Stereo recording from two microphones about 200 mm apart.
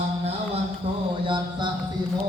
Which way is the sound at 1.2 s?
25° right (ahead or behind).